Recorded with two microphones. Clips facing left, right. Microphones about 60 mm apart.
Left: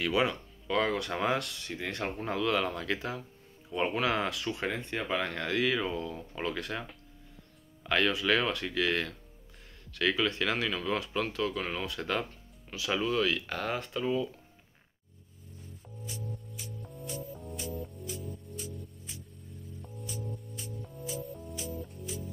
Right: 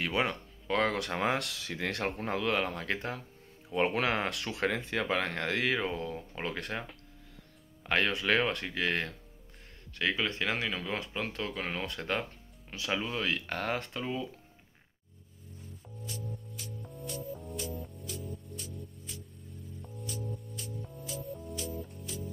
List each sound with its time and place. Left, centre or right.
0.0 s speech: right
1.1 s speech: right
1.4 s speech: right
2.5 s speech: right
3.7 s speech: right
4.0 s speech: right
4.3 s speech: right
5.2 s speech: right
11.1 s speech: right
13.5 s speech: right
16.0 s music: centre